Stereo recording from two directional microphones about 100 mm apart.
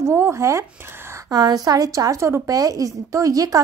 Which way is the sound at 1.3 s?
40° right (ahead or behind).